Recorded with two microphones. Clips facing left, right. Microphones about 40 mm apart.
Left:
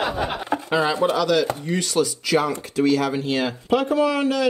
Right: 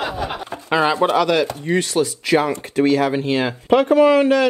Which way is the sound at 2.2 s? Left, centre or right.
Right.